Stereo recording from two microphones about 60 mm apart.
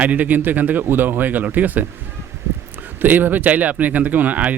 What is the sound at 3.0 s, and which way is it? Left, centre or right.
Speech, right.